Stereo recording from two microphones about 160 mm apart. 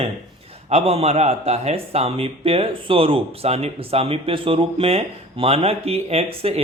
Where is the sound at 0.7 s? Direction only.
40° right (ahead or behind).